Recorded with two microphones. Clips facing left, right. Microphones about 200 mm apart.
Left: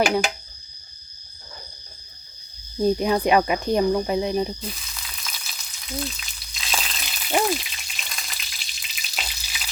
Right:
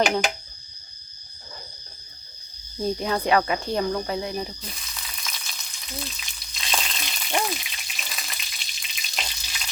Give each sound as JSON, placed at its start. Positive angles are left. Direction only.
{"t": 0.0, "sound": "speech", "side_deg": 10}
{"t": 2.7, "sound": "speech", "side_deg": 15}
{"t": 4.6, "sound": "frying", "side_deg": 0}